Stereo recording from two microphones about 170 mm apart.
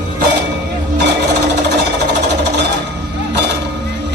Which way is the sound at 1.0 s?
80° right.